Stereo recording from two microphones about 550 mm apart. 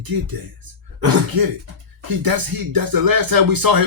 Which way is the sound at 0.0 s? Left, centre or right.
Right.